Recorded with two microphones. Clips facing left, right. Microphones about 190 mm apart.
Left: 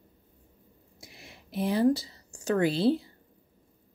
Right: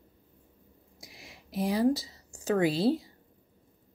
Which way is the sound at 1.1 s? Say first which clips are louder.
Even; 55° left (ahead or behind).